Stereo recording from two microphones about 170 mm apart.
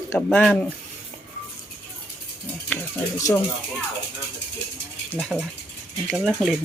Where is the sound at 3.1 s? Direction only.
20° left (ahead or behind).